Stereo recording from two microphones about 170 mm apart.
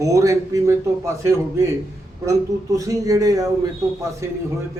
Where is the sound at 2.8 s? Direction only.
20° right (ahead or behind).